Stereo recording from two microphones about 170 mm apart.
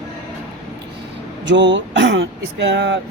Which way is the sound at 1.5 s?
90° right.